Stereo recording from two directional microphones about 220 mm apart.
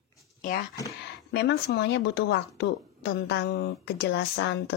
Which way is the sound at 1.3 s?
50° left (ahead or behind).